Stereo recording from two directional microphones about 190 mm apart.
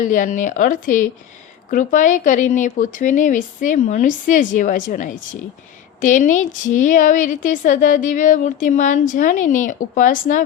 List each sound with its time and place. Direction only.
0.0 s a woman's voice: 40° left (ahead or behind)